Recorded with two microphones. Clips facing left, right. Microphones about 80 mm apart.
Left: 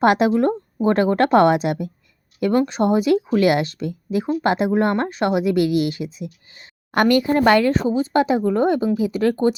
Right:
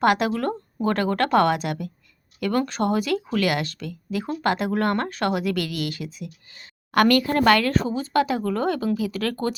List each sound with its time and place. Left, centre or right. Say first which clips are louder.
0.0 s speech: left 5 dB; left